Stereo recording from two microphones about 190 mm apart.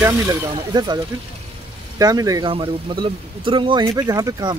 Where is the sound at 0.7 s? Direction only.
20° right (ahead or behind).